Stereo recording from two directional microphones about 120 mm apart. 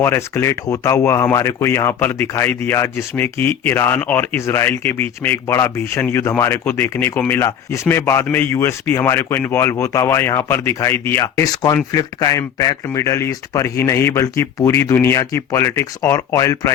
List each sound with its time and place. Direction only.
0.0 s speech: 20° left (ahead or behind)